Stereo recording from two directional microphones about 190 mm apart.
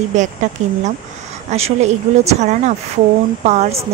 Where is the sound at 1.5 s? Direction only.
35° right (ahead or behind).